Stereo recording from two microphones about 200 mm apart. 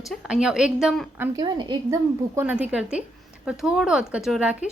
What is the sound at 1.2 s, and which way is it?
Speech, 20° right (ahead or behind).